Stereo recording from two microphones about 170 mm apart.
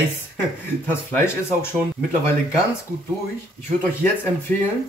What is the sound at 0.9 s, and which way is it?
Speech, 15° left (ahead or behind).